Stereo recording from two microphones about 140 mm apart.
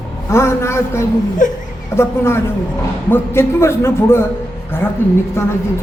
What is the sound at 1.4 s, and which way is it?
Speech, 65° left (ahead or behind).